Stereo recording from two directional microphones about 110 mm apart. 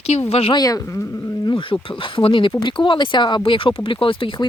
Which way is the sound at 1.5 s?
50° left (ahead or behind).